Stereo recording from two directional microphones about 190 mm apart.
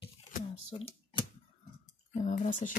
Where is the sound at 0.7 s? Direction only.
30° left (ahead or behind).